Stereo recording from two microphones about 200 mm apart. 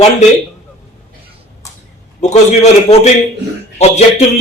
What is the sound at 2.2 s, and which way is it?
Speech, 35° left (ahead or behind).